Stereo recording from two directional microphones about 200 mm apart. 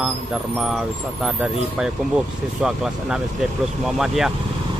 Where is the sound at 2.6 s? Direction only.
5° right (ahead or behind).